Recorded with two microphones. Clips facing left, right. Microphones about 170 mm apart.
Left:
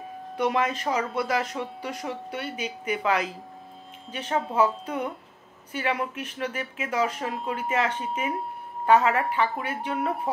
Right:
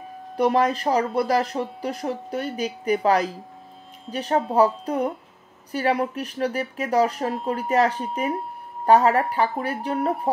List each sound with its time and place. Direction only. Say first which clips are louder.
0.4 s speech: right 5 dB; 35° right (ahead or behind)